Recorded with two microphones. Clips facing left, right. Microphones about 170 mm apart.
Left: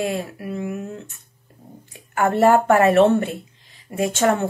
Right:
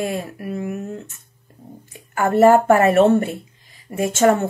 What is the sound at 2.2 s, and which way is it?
Speech, 10° right (ahead or behind).